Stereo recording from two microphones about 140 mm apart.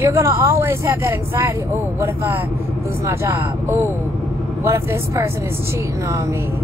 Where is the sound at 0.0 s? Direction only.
15° right (ahead or behind).